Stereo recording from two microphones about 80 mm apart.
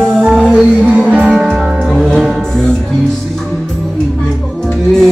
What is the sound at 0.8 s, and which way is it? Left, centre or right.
Music, centre.